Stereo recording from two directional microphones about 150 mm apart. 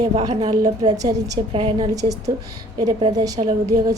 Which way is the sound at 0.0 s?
25° right (ahead or behind).